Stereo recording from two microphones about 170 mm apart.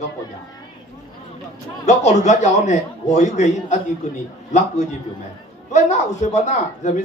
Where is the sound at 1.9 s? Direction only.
45° left (ahead or behind).